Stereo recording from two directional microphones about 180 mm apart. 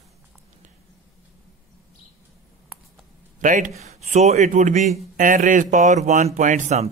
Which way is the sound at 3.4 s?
45° right (ahead or behind).